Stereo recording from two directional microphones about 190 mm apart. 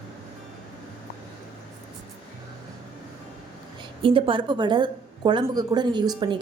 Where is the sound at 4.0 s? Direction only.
30° right (ahead or behind).